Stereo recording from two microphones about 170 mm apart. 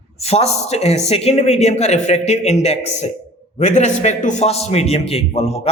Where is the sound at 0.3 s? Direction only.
40° left (ahead or behind).